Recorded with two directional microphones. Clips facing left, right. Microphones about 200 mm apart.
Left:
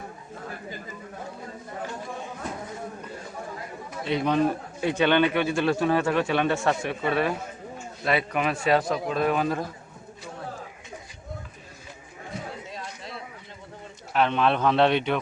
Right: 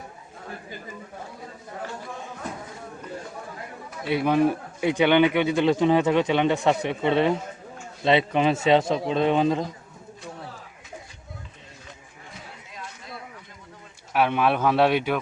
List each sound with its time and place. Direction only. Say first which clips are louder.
4.0 s a man's voice: right 2 dB; 10° right (ahead or behind)
14.1 s speech: right 1 dB; 10° right (ahead or behind)